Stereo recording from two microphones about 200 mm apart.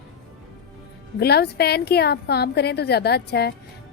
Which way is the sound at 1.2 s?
55° left (ahead or behind).